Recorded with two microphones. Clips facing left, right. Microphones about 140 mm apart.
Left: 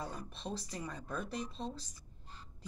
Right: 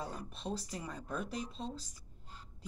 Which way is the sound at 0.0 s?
10° right (ahead or behind).